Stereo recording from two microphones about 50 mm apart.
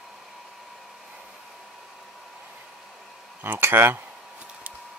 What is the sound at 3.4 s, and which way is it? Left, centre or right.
Speech, right.